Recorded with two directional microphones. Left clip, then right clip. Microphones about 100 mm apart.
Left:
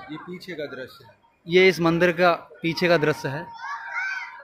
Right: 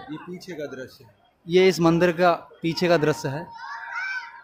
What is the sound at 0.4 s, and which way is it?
A man's voice, 20° right (ahead or behind).